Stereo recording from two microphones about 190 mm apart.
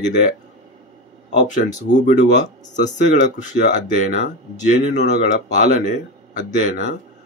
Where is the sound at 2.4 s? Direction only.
40° left (ahead or behind).